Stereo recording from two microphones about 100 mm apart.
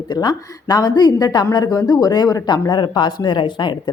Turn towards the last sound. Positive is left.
turn(degrees=50)  # may be behind; listen again after turning